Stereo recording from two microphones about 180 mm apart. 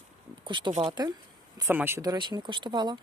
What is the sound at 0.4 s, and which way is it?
Speech, 25° right (ahead or behind).